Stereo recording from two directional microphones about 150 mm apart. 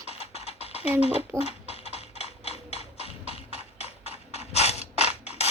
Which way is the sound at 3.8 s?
45° left (ahead or behind).